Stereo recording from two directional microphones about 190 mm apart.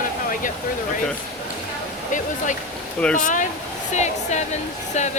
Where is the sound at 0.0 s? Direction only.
45° left (ahead or behind).